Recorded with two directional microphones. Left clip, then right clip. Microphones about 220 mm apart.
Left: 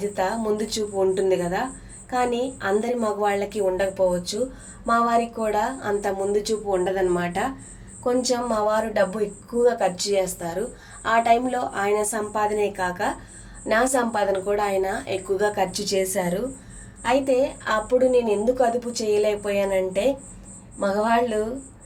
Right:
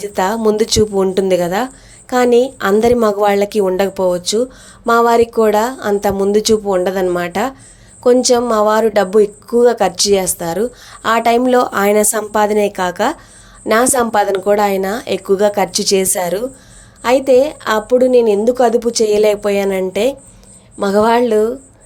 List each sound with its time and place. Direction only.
0.0 s speech: 45° right (ahead or behind)